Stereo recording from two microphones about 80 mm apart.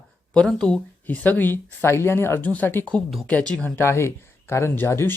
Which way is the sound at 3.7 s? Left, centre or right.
Left.